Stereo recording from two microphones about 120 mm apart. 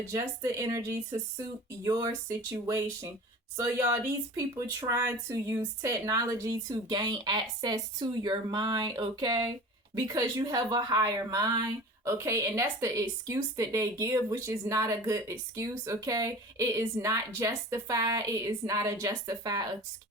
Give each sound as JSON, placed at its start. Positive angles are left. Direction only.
{"t": 0.1, "sound": "speech", "side_deg": -25}